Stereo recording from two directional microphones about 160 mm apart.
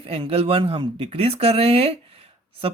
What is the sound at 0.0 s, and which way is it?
Speech, 35° right (ahead or behind).